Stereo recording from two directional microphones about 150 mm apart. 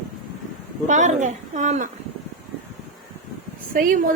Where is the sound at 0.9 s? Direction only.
55° right (ahead or behind).